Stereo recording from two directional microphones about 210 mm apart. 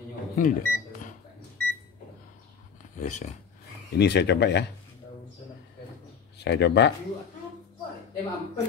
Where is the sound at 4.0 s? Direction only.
55° left (ahead or behind).